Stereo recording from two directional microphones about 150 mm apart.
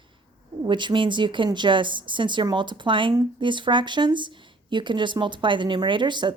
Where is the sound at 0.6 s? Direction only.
30° right (ahead or behind).